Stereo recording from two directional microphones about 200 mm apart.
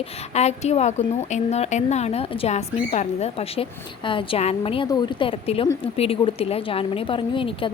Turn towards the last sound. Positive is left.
turn(degrees=25)  # may be behind; listen again after turning